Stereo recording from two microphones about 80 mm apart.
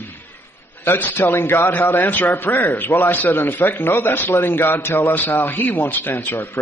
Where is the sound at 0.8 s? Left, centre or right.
Left.